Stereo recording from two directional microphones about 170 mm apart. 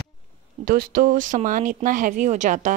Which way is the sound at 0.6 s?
55° right (ahead or behind).